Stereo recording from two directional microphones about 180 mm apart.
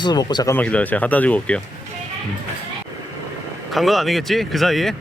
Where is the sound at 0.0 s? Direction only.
25° left (ahead or behind).